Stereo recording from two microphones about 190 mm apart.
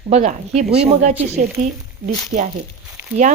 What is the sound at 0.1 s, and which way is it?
Speech, 35° right (ahead or behind).